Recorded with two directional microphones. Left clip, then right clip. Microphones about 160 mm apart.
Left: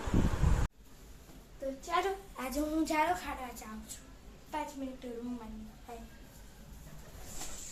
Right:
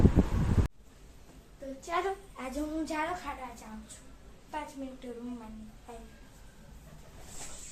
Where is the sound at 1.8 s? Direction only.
5° left (ahead or behind).